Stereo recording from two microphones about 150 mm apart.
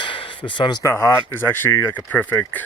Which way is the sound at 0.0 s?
35° left (ahead or behind).